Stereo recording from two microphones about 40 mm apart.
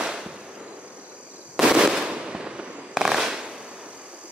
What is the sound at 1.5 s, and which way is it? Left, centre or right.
Fireworks, centre.